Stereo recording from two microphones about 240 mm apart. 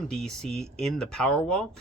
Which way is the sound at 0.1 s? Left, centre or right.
Centre.